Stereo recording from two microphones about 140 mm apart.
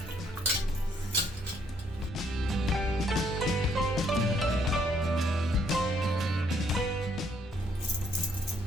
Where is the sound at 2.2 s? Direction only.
Centre (ahead or behind).